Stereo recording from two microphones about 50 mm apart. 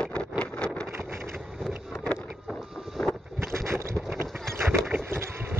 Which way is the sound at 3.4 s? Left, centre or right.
Right.